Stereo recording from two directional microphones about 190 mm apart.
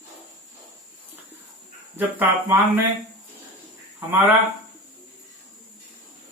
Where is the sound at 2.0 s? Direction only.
10° right (ahead or behind).